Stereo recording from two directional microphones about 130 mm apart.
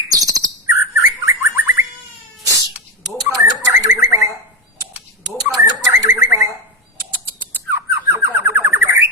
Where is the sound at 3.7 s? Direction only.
20° right (ahead or behind).